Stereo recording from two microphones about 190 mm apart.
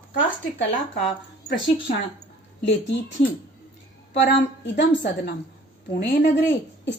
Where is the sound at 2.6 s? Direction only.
70° left (ahead or behind).